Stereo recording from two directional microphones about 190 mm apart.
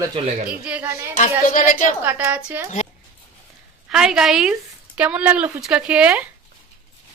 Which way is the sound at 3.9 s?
5° right (ahead or behind).